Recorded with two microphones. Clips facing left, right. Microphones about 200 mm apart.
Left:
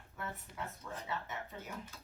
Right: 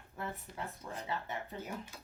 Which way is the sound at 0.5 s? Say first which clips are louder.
Right 2 dB; 30° right (ahead or behind).